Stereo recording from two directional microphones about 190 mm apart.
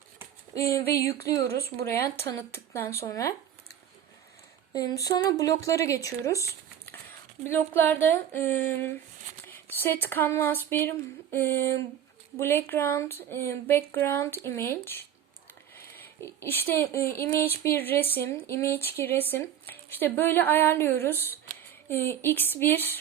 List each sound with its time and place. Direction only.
0.5 s speech: 15° left (ahead or behind)
4.7 s speech: 20° left (ahead or behind)
16.2 s speech: 10° left (ahead or behind)